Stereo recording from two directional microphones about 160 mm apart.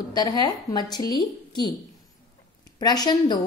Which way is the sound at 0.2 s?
25° left (ahead or behind).